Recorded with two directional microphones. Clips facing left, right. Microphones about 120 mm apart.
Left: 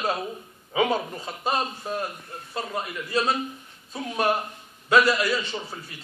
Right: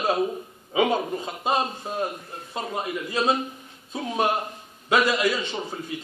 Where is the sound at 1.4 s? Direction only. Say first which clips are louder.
Right 1 dB; 20° right (ahead or behind).